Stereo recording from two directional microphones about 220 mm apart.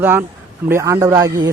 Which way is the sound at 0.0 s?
10° right (ahead or behind).